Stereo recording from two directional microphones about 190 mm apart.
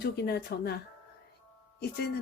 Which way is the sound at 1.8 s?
60° left (ahead or behind).